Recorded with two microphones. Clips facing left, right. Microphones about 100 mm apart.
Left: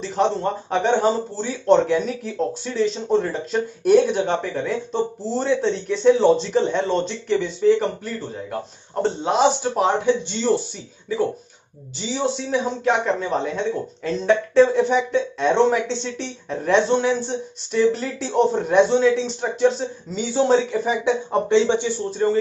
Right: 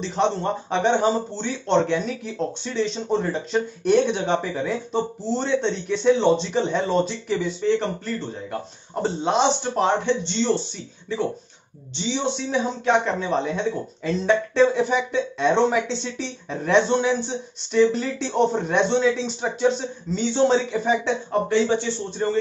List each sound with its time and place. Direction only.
0.0 s speech: centre (ahead or behind)
12.1 s speech: 5° left (ahead or behind)
21.3 s speech: 20° left (ahead or behind)